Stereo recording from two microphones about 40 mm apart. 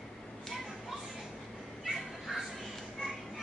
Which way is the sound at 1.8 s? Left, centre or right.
Centre.